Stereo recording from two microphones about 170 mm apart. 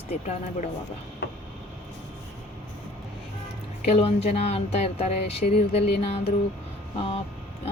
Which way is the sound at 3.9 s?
35° left (ahead or behind).